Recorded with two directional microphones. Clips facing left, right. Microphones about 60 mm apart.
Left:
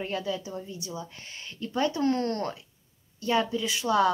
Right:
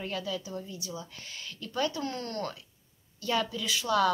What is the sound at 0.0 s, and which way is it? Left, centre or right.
Speech, left.